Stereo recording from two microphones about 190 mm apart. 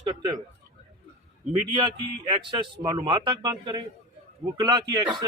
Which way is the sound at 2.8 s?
20° right (ahead or behind).